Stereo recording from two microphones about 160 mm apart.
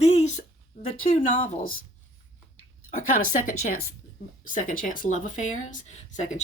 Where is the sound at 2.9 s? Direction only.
55° left (ahead or behind).